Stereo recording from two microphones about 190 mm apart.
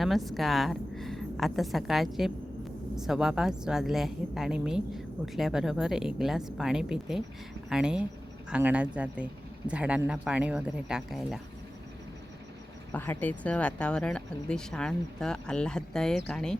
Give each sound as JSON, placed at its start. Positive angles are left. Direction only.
{"t": 0.0, "sound": "a woman's voice", "side_deg": 0}
{"t": 12.9, "sound": "speech", "side_deg": 10}